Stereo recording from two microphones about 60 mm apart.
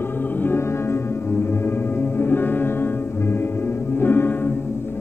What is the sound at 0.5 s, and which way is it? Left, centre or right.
Music, left.